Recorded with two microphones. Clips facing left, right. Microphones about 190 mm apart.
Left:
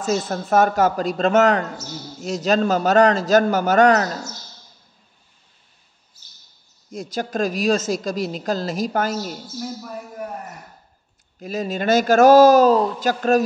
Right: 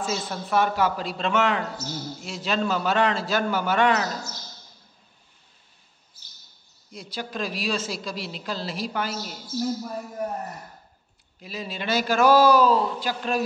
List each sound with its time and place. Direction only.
0.0 s a woman's voice: 45° left (ahead or behind)
6.9 s a woman's voice: 45° left (ahead or behind)
11.3 s a woman's voice: 45° left (ahead or behind)